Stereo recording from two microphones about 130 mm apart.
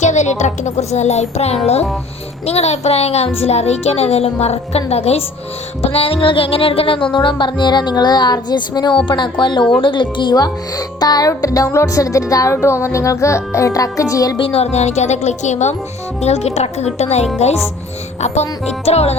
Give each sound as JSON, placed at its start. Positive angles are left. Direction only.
{"t": 0.0, "sound": "music", "side_deg": 65}
{"t": 9.8, "sound": "speech", "side_deg": 40}
{"t": 14.3, "sound": "music", "side_deg": 45}
{"t": 18.9, "sound": "music", "side_deg": 55}